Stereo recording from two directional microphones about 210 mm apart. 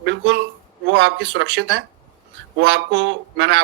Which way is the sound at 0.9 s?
60° right (ahead or behind).